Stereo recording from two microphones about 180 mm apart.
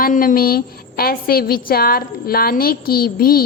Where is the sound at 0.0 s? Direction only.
50° left (ahead or behind).